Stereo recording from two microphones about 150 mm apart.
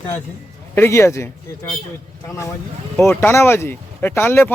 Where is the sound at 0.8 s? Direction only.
20° left (ahead or behind).